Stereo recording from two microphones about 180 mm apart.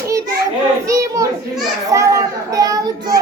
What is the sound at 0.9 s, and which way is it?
Child singing, 20° right (ahead or behind).